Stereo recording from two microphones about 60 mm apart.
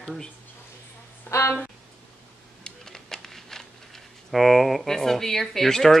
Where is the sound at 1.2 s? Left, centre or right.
Left.